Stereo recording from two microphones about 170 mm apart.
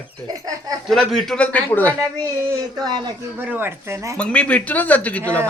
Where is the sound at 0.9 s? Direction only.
Centre (ahead or behind).